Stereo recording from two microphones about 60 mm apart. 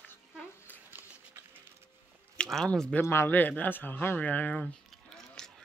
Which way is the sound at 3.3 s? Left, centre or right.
Left.